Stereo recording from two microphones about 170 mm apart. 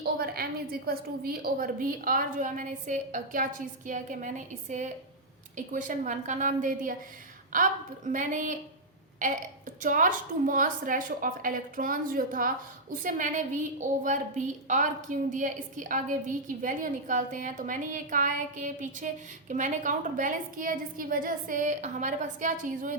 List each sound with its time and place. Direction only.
0.0 s a woman's voice: 65° right (ahead or behind)